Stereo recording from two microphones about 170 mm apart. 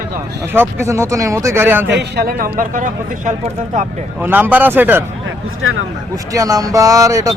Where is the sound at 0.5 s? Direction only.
15° right (ahead or behind).